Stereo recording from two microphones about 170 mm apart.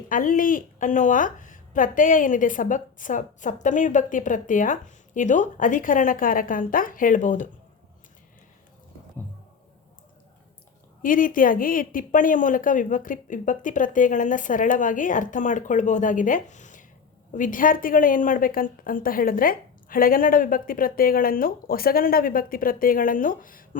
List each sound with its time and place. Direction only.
0.1 s a woman's voice: 50° left (ahead or behind)
11.0 s a woman's voice: 55° left (ahead or behind)